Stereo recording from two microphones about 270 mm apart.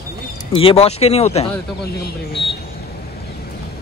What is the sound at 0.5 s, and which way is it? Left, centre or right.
Speech, left.